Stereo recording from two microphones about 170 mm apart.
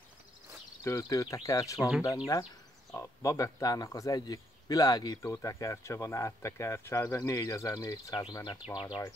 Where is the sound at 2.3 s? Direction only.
20° left (ahead or behind).